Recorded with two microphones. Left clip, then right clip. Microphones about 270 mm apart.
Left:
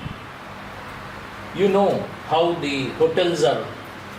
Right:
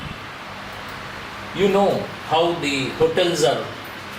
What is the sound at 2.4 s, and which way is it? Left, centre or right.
Speech, left.